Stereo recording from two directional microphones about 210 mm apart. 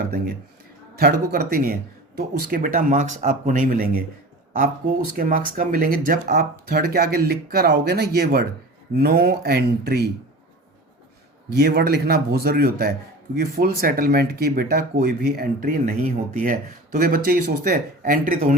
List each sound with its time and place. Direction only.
0.9 s speech: 45° right (ahead or behind)
11.5 s speech: 50° right (ahead or behind)